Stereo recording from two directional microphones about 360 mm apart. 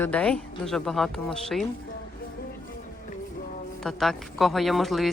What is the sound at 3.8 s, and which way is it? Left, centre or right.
A woman's voice, centre.